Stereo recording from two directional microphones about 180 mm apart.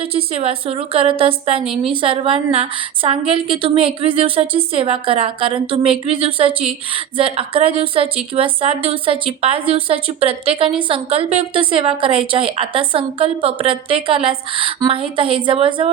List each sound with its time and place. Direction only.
0.0 s a woman's voice: 30° right (ahead or behind)
1.6 s a woman's voice: 5° right (ahead or behind)
1.9 s a woman's voice: 30° right (ahead or behind)